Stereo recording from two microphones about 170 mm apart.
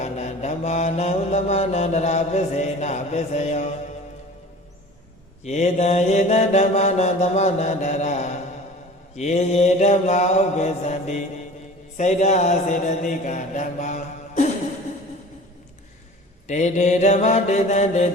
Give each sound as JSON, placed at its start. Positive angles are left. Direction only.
{"t": 0.0, "sound": "mantra", "side_deg": 40}
{"t": 5.4, "sound": "mantra", "side_deg": 40}
{"t": 16.5, "sound": "mantra", "side_deg": 45}